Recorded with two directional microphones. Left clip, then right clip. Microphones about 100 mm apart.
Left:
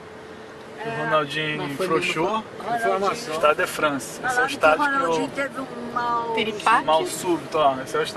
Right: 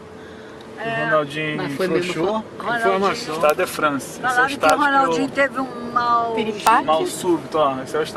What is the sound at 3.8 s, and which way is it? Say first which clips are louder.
Speech: right 3 dB; 5° left (ahead or behind).